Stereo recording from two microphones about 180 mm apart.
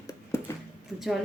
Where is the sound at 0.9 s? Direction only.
Centre (ahead or behind).